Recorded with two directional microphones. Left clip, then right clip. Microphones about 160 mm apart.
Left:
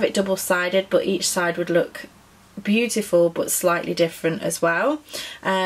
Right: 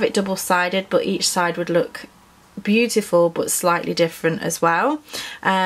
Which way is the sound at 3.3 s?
30° right (ahead or behind).